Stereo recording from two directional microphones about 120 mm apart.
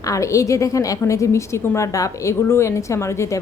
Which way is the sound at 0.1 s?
25° left (ahead or behind).